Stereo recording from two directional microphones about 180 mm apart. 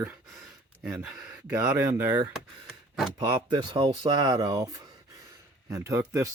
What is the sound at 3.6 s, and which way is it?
Speech, 25° right (ahead or behind).